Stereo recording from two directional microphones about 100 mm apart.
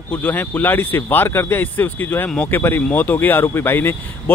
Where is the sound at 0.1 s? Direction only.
15° left (ahead or behind).